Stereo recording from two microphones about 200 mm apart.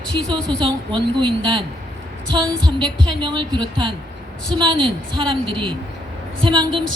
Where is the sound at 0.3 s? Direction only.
25° right (ahead or behind).